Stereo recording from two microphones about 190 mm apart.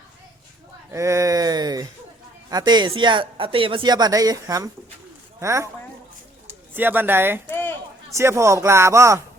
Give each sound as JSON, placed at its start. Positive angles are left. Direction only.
{"t": 0.9, "sound": "speech", "side_deg": -15}
{"t": 7.5, "sound": "a sound", "side_deg": 10}
{"t": 8.1, "sound": "speech", "side_deg": -15}